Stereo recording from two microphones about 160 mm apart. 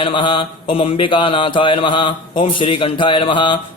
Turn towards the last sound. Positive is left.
turn(degrees=30)  # may be behind; listen again after turning